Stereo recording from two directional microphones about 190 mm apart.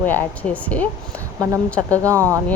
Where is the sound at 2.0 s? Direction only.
15° right (ahead or behind).